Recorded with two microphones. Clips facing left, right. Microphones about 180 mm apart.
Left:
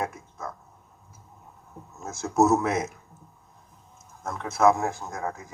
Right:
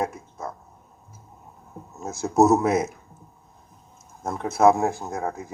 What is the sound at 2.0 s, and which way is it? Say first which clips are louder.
Speech: right 3 dB; 35° right (ahead or behind).